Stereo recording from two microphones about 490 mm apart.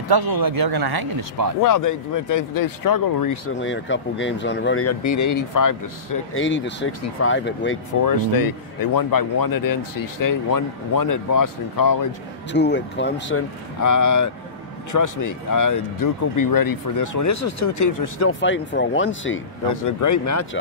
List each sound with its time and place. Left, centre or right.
0.1 s speech: right
1.6 s speech: left
3.4 s speech: left
6.3 s speech: left
8.0 s speech: left
12.5 s speech: left
13.7 s speech: left
18.4 s speech: left
19.7 s speech: left